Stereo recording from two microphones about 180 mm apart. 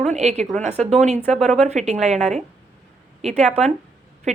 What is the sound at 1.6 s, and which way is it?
A woman's voice, 40° right (ahead or behind).